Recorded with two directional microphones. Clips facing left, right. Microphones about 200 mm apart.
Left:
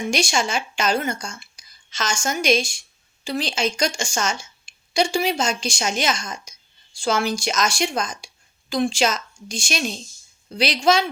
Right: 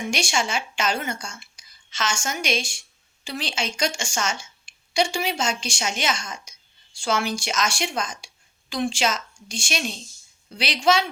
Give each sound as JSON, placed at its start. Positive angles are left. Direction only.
{"t": 0.1, "sound": "a woman's voice", "side_deg": 40}